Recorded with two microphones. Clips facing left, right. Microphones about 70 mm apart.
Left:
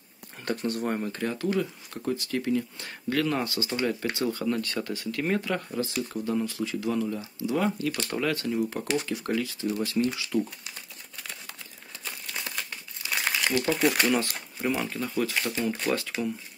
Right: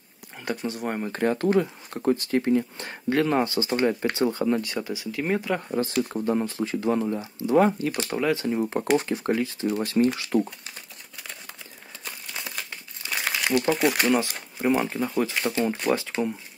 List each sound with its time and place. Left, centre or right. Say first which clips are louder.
0.5 s speech: even; centre
0.8 s speech: right 2 dB; right
1.1 s speech: right 6 dB; right; by 5.6 s centre
5.7 s speech: right 5 dB; right
8.1 s speech: right 5 dB; centre
8.8 s speech: right 6 dB; right
12.0 s crumpling: even; centre
13.7 s speech: right 2 dB; centre
14.8 s speech: right 4 dB; right